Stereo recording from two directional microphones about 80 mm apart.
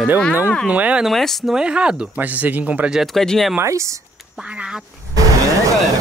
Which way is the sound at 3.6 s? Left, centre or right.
Right.